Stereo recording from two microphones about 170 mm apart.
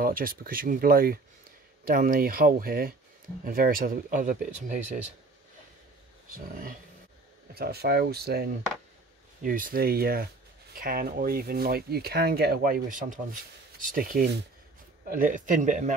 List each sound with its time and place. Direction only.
0.0 s speech: 55° right (ahead or behind)
7.5 s speech: 65° right (ahead or behind)
9.4 s speech: 55° right (ahead or behind)